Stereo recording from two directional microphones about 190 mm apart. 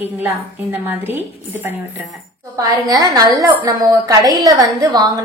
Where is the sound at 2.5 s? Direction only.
20° right (ahead or behind).